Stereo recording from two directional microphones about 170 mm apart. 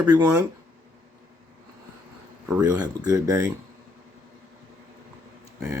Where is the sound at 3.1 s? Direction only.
20° right (ahead or behind).